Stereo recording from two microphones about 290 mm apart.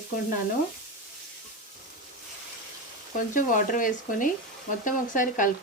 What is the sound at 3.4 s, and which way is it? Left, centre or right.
Speech, left.